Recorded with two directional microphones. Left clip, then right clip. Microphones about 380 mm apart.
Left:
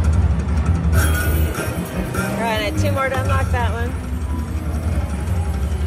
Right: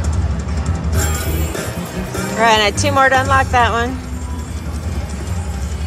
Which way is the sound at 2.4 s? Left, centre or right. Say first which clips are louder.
Right 11 dB; centre.